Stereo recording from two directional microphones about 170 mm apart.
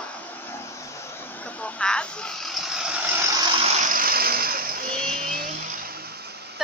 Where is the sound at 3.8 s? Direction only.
55° right (ahead or behind).